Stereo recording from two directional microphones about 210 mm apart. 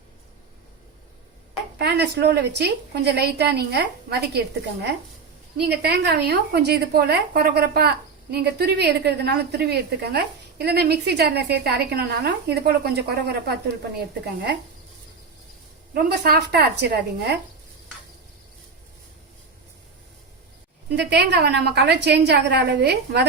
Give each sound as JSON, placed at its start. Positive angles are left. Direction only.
{"t": 1.8, "sound": "a woman's voice", "side_deg": -50}
{"t": 16.0, "sound": "a woman's voice", "side_deg": -50}
{"t": 20.9, "sound": "a woman's voice", "side_deg": -50}